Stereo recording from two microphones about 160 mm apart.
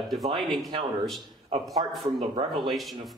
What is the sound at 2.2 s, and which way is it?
Speech, 35° right (ahead or behind).